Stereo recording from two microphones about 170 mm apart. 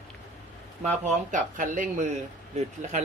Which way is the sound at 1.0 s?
50° right (ahead or behind).